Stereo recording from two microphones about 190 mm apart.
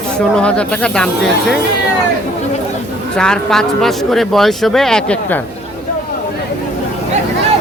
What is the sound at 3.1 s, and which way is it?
Speech, 5° left (ahead or behind).